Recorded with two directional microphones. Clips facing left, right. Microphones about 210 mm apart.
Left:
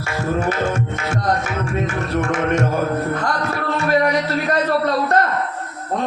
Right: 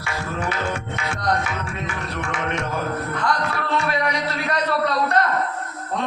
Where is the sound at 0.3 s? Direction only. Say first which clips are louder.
Left 5 dB; 45° left (ahead or behind).